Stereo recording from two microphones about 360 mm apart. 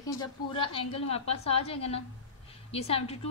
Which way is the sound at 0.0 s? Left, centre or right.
Centre.